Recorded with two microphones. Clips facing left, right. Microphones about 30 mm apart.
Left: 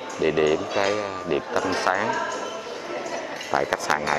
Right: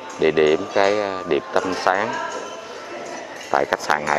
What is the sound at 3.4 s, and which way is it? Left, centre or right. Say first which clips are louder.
Speech: right 4 dB; centre.